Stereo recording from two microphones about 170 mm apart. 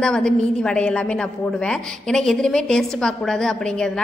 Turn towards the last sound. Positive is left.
turn(degrees=5)  # may be behind; listen again after turning